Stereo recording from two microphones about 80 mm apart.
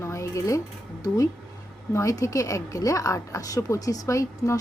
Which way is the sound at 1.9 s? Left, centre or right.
Left.